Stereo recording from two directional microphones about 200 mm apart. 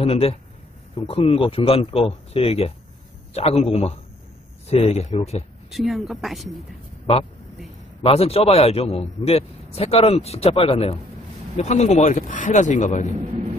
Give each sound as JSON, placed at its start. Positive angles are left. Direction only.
{"t": 0.0, "sound": "a man's voice", "side_deg": 30}
{"t": 5.7, "sound": "speech", "side_deg": 0}
{"t": 8.0, "sound": "a man's voice", "side_deg": 30}